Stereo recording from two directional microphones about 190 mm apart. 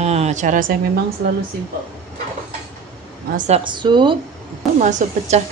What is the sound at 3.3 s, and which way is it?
Speech, 40° right (ahead or behind).